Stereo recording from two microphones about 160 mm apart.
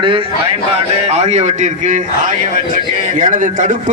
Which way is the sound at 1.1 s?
45° right (ahead or behind).